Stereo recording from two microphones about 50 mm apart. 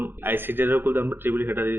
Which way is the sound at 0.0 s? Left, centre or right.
Right.